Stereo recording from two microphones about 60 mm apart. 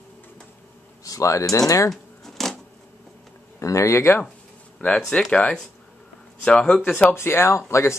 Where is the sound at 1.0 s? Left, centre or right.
Left.